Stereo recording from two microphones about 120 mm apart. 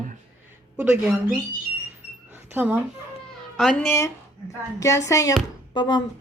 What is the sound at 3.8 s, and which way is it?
Speech, 20° left (ahead or behind).